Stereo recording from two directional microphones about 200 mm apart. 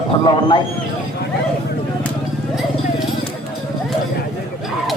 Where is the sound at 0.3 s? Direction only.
25° left (ahead or behind).